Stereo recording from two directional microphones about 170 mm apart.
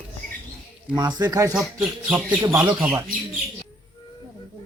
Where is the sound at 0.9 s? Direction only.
25° right (ahead or behind).